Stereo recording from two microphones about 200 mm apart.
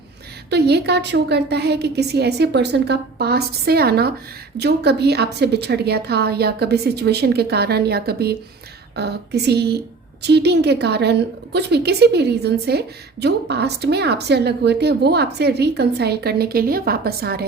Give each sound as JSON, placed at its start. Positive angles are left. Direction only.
{"t": 0.5, "sound": "a woman's voice", "side_deg": -55}